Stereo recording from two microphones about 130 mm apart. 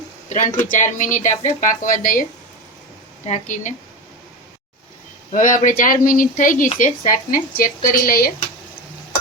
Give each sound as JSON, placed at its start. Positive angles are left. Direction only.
{"t": 0.3, "sound": "speech", "side_deg": 75}
{"t": 1.6, "sound": "speech", "side_deg": 90}
{"t": 3.2, "sound": "speech", "side_deg": 70}
{"t": 5.3, "sound": "speech", "side_deg": 90}